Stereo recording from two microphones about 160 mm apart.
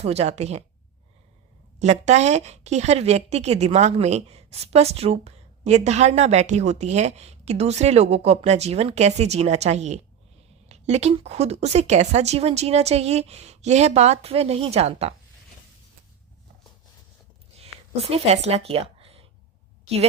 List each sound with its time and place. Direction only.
0.0 s a woman's voice: 40° right (ahead or behind)
1.8 s a woman's voice: 45° right (ahead or behind)
17.6 s a sound: 40° right (ahead or behind)